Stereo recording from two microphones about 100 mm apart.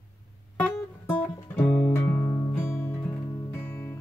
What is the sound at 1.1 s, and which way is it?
Music, 15° left (ahead or behind).